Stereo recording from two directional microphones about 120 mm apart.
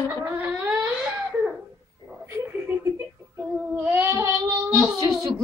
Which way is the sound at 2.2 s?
20° right (ahead or behind).